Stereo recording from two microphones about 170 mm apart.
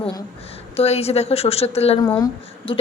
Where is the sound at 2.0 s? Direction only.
20° left (ahead or behind).